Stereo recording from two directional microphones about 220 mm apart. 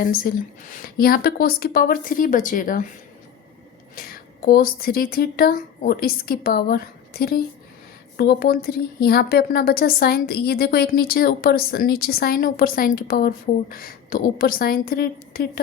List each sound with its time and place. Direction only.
0.0 s a woman's voice: 40° left (ahead or behind)
3.9 s a woman's voice: 40° left (ahead or behind)